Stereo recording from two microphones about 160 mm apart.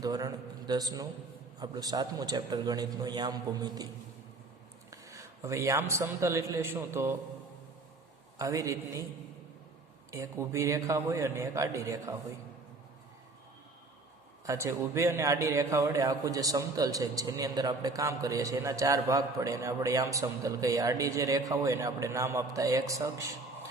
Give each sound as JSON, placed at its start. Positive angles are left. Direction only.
{"t": 0.0, "sound": "a man's voice", "side_deg": -25}
{"t": 4.9, "sound": "a man's voice", "side_deg": -20}
{"t": 8.4, "sound": "a man's voice", "side_deg": -20}
{"t": 10.1, "sound": "a man's voice", "side_deg": -20}
{"t": 14.4, "sound": "a man's voice", "side_deg": -20}